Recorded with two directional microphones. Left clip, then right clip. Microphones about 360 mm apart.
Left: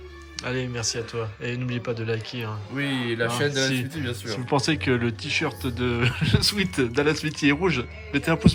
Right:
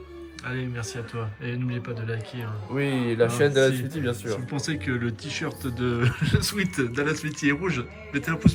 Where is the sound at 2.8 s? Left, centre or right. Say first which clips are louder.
Even; right.